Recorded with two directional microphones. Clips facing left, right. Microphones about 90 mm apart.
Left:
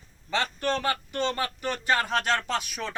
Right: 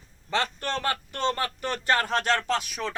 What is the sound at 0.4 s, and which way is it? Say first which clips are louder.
Speech: left 2 dB; 15° left (ahead or behind).